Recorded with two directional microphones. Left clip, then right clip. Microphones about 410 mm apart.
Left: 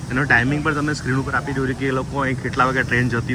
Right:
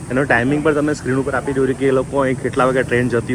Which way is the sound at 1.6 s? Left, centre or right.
Right.